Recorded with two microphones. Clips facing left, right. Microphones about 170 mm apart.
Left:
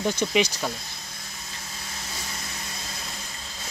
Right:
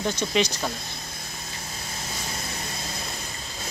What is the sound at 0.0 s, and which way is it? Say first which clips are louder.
Speech: left 1 dB; 10° left (ahead or behind).